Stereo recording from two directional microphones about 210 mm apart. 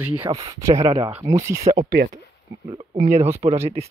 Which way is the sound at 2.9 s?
35° right (ahead or behind).